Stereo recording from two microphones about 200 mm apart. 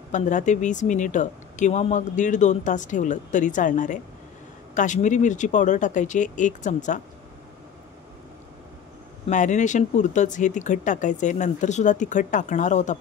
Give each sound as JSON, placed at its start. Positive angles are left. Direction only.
{"t": 0.1, "sound": "speech", "side_deg": 40}
{"t": 9.3, "sound": "speech", "side_deg": 40}